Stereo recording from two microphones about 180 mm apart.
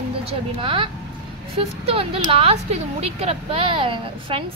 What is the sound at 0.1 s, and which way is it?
A woman's voice, 30° right (ahead or behind).